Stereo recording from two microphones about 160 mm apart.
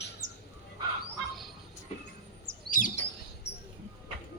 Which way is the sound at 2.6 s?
55° left (ahead or behind).